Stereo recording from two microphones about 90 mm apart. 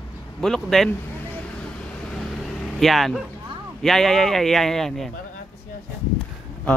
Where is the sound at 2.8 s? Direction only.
Centre (ahead or behind).